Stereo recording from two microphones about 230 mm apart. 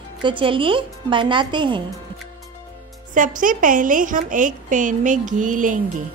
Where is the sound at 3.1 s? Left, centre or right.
Right.